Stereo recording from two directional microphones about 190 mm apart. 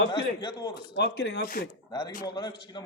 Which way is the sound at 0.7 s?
65° left (ahead or behind).